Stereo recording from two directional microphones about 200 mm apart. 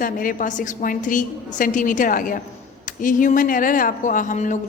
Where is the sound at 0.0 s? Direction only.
45° left (ahead or behind).